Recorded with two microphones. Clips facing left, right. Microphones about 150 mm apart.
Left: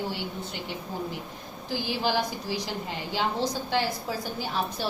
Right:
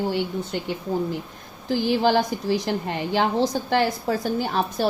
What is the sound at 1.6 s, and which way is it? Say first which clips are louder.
A woman's voice: right 8 dB; 55° right (ahead or behind).